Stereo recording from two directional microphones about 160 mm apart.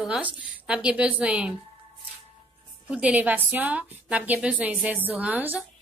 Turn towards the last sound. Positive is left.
turn(degrees=-10)  # may be behind; listen again after turning